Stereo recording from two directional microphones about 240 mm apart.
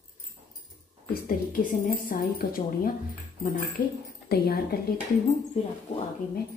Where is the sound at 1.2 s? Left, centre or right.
Left.